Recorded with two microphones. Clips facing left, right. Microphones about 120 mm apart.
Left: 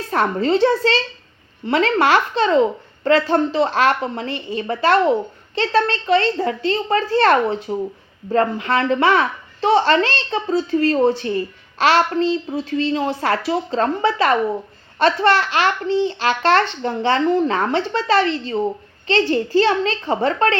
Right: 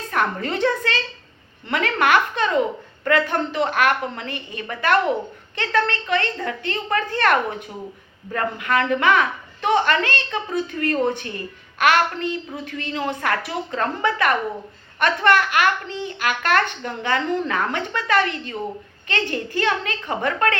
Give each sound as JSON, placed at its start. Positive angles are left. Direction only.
{"t": 0.1, "sound": "a woman's voice", "side_deg": 25}